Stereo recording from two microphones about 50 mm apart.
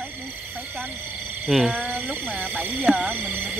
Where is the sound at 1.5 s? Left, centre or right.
Centre.